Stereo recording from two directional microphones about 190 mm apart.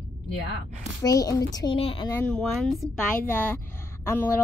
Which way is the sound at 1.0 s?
20° left (ahead or behind).